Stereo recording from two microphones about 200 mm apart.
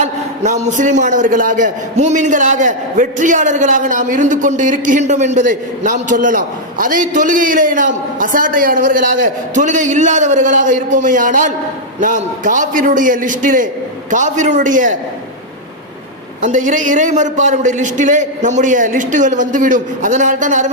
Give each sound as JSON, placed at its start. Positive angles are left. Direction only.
{"t": 0.0, "sound": "a man's voice", "side_deg": -35}
{"t": 16.4, "sound": "a man's voice", "side_deg": -40}